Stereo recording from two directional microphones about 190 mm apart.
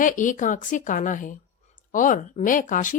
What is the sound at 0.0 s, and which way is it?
A woman's voice, 45° left (ahead or behind).